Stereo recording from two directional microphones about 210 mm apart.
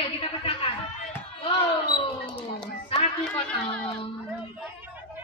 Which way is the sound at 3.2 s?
5° left (ahead or behind).